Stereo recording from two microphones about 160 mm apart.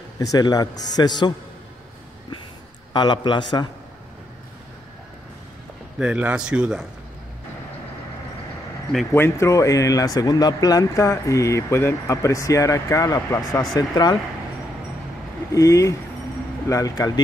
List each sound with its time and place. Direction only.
0.2 s speech: 20° left (ahead or behind)
2.9 s speech: 30° left (ahead or behind)
5.9 s speech: 5° right (ahead or behind)
9.1 s speech: 15° left (ahead or behind)
15.5 s speech: 20° left (ahead or behind)